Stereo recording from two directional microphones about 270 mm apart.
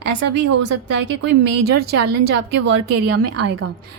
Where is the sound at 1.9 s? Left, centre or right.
Right.